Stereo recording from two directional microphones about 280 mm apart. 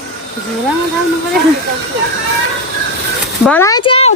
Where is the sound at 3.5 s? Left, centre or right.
Centre.